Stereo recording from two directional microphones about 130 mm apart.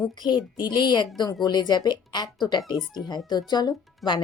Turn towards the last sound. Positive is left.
turn(degrees=35)  # may be behind; listen again after turning